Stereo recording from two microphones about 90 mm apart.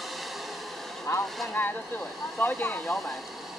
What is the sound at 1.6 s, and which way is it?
Speech, 25° left (ahead or behind).